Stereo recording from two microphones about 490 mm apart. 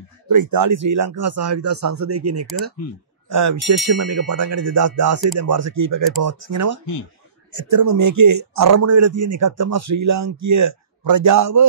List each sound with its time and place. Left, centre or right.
0.3 s a man's voice: right